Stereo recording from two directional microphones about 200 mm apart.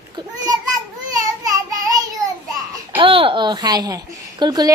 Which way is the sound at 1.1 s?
15° right (ahead or behind).